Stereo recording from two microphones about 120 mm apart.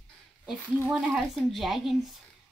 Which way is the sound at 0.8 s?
10° right (ahead or behind).